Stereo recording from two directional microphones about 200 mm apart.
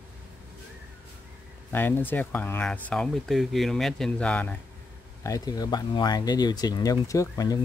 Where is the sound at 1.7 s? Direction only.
10° left (ahead or behind).